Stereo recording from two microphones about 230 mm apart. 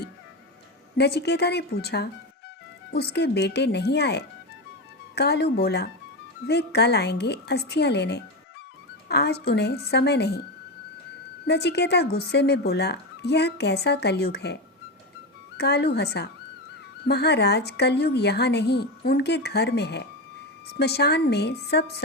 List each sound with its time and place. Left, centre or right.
0.9 s speech: left
11.4 s speech: left